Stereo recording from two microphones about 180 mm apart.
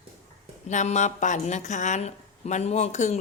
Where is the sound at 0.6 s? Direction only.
40° left (ahead or behind).